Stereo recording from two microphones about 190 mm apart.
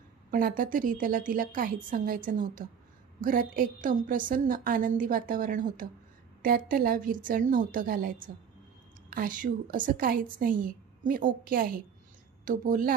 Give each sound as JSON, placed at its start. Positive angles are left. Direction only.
{"t": 0.3, "sound": "a woman's voice", "side_deg": -45}